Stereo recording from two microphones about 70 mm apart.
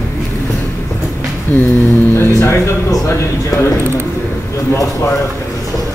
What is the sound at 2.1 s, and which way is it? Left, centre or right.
Speech, left.